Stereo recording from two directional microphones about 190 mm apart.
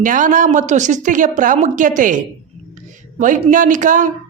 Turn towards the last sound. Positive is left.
turn(degrees=-40)  # may be behind; listen again after turning